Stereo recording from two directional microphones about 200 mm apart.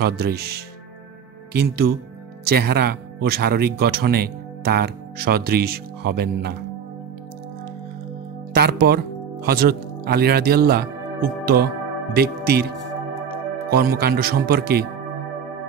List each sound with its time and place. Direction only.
0.0 s speech: 50° right (ahead or behind)
8.5 s speech: 55° right (ahead or behind)